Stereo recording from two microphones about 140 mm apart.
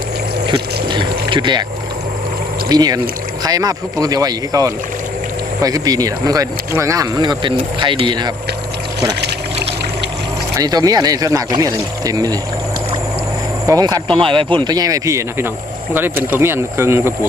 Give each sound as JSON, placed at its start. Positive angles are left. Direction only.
{"t": 0.4, "sound": "a sound", "side_deg": -35}
{"t": 2.6, "sound": "speech", "side_deg": -30}
{"t": 10.6, "sound": "speech", "side_deg": -25}
{"t": 13.7, "sound": "speech", "side_deg": -25}
{"t": 14.2, "sound": "speech", "side_deg": -40}